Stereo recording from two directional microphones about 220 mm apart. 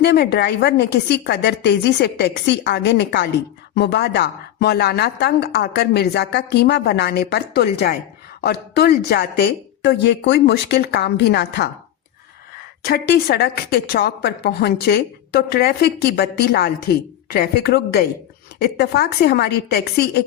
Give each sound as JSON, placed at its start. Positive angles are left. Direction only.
{"t": 0.0, "sound": "a woman's voice", "side_deg": 50}